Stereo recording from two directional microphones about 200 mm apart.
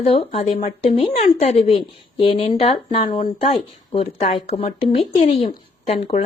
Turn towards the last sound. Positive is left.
turn(degrees=30)  # may be behind; listen again after turning